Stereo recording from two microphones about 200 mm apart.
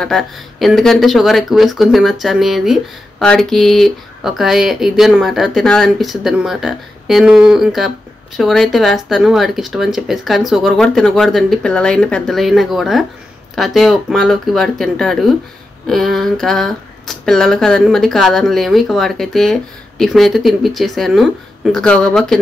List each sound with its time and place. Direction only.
0.0 s speech: centre (ahead or behind)